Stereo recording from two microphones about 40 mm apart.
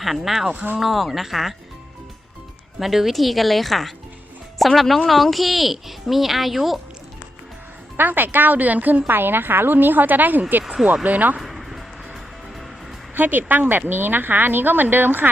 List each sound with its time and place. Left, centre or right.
0.0 s speech: centre
0.5 s a woman's voice: right
0.8 s speech: centre
2.7 s speech: centre
7.9 s a woman's voice: right
11.3 s music: centre
13.1 s speech: right